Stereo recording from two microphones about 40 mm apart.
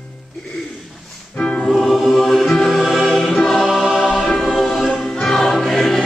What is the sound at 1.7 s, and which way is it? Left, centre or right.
Music, centre.